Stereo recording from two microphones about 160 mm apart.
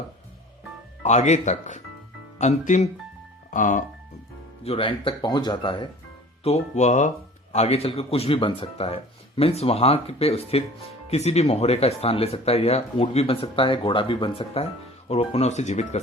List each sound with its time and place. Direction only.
1.0 s speech: 45° left (ahead or behind)
4.6 s speech: 35° left (ahead or behind)
6.4 s speech: 45° left (ahead or behind)